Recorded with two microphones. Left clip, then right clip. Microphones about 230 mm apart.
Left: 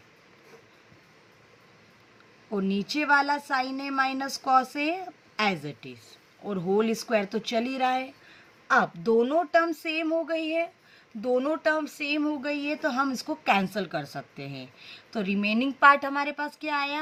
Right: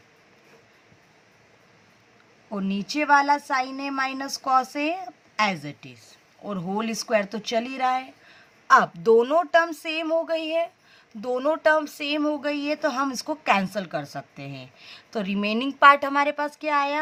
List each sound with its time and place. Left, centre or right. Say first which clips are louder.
2.6 s speech: right 1 dB; right